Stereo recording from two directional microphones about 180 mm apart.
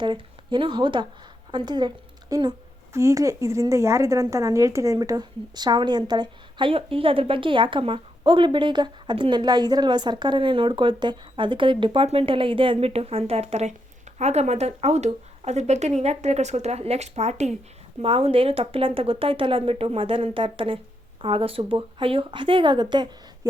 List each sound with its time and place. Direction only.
0.0 s a woman's voice: 25° right (ahead or behind)